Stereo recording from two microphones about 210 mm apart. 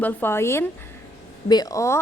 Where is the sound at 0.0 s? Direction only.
10° left (ahead or behind).